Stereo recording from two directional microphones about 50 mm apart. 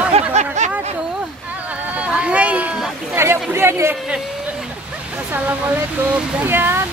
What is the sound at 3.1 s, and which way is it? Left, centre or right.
Speech, right.